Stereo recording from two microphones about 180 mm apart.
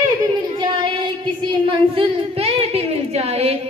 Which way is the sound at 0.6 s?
25° right (ahead or behind).